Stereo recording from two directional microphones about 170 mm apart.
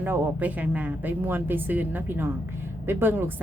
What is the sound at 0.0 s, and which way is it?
A woman's voice, 10° right (ahead or behind).